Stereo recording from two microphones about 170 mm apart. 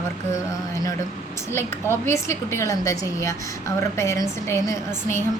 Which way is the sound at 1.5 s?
15° left (ahead or behind).